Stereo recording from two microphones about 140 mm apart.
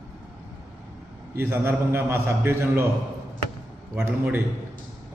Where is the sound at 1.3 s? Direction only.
15° right (ahead or behind).